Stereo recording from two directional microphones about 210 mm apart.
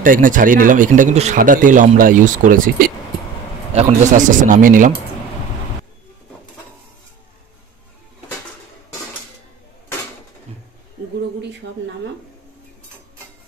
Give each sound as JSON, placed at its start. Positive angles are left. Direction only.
{"t": 0.0, "sound": "speech", "side_deg": -40}